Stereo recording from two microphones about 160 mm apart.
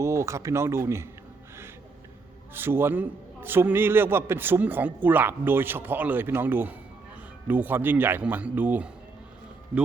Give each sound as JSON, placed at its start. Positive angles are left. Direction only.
{"t": 0.0, "sound": "speech", "side_deg": -20}
{"t": 2.6, "sound": "a man's voice", "side_deg": -15}